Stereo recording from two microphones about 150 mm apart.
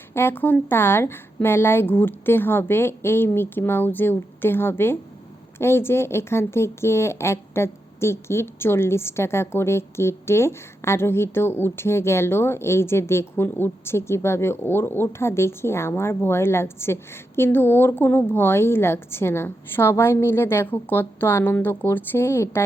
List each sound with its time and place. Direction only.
0.1 s speech: 15° left (ahead or behind)